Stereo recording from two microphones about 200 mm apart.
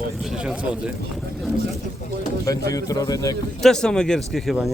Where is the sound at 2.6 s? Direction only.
15° left (ahead or behind).